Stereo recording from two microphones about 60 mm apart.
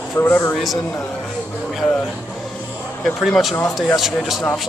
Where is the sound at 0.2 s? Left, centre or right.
Left.